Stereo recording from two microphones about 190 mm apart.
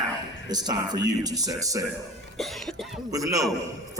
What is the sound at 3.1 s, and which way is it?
Speech, 20° right (ahead or behind).